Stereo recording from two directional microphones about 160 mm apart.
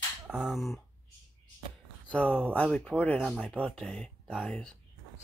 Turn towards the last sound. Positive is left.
turn(degrees=5)  # may be behind; listen again after turning